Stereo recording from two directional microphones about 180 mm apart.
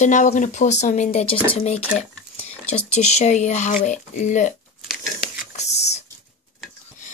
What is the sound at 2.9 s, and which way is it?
Speech, 40° left (ahead or behind).